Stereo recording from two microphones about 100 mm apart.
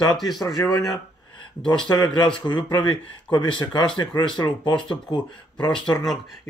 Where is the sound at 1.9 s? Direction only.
45° left (ahead or behind).